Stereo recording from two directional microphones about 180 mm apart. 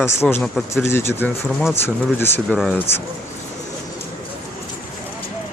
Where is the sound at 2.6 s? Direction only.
Centre (ahead or behind).